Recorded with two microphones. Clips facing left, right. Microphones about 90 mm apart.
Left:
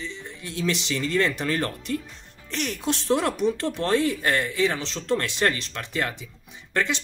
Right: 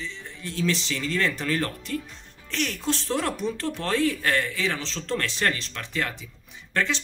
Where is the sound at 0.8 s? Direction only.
20° left (ahead or behind).